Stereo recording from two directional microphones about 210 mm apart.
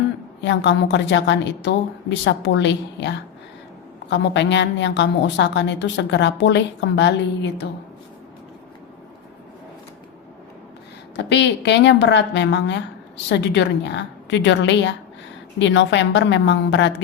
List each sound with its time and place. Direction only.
0.4 s a woman's voice: 60° left (ahead or behind)
11.2 s a woman's voice: 55° left (ahead or behind)